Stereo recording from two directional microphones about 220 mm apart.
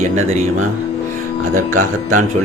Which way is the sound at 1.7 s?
35° right (ahead or behind).